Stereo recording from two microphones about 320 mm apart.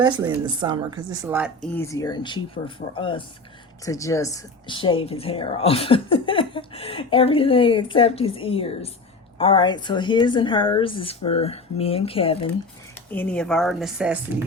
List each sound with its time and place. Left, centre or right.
0.0 s a woman's voice: centre
13.1 s a woman's voice: centre